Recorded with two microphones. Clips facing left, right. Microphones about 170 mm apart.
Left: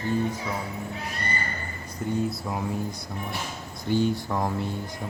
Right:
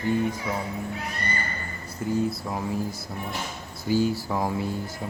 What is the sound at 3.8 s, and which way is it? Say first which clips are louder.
Speech: right 1 dB; 5° right (ahead or behind).